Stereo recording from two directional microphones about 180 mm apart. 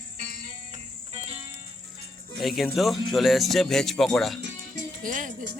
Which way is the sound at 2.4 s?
Centre (ahead or behind).